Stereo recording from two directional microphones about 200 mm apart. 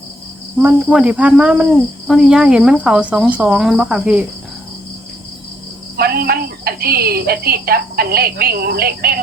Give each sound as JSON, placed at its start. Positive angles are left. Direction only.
{"t": 0.6, "sound": "speech", "side_deg": -5}
{"t": 6.0, "sound": "a woman's voice", "side_deg": -50}